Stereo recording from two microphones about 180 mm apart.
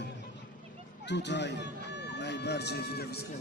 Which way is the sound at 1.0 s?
75° left (ahead or behind).